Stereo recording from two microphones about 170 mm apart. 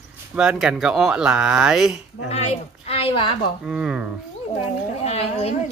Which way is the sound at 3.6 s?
5° right (ahead or behind).